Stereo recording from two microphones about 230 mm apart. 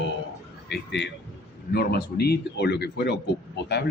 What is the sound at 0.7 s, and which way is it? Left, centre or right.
A man's voice, left.